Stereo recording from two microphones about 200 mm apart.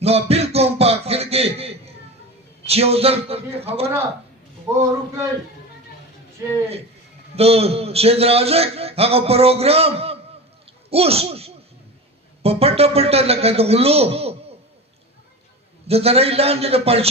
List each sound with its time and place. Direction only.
0.0 s music: 30° right (ahead or behind)
2.6 s a man's voice: 30° right (ahead or behind)
4.8 s a man's voice: 15° right (ahead or behind)
7.3 s a man's voice: 30° right (ahead or behind)
15.9 s a man's voice: 30° right (ahead or behind)